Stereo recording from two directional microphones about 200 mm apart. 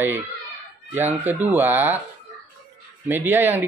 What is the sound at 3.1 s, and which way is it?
Speech, 10° right (ahead or behind).